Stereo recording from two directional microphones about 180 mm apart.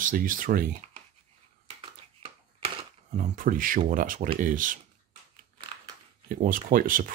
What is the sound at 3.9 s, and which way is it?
Speech, 50° right (ahead or behind).